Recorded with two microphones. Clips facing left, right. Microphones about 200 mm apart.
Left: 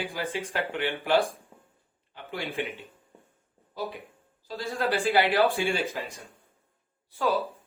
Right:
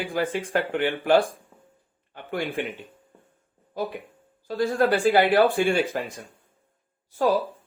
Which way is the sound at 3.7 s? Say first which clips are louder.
Right 5 dB; 50° right (ahead or behind).